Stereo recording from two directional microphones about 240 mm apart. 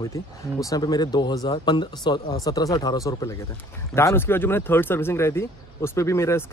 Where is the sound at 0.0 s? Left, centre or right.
Centre.